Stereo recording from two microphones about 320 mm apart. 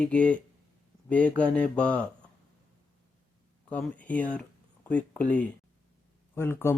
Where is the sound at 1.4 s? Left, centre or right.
Centre.